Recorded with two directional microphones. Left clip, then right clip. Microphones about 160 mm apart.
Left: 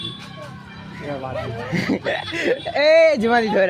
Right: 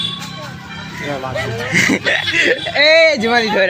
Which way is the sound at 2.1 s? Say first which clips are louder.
Right 8 dB; 35° left (ahead or behind).